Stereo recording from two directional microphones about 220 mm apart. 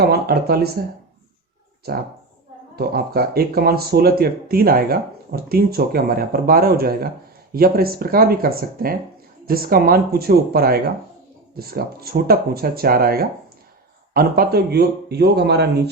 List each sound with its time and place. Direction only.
0.0 s speech: 45° right (ahead or behind)
1.9 s speech: 45° right (ahead or behind)